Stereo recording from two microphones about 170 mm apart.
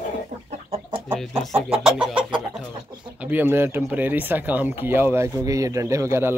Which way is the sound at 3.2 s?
10° right (ahead or behind).